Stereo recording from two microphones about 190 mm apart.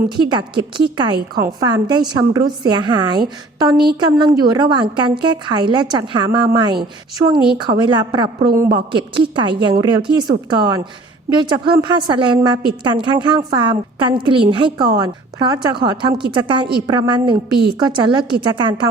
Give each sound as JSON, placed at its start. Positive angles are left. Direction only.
{"t": 0.2, "sound": "a woman's voice", "side_deg": -25}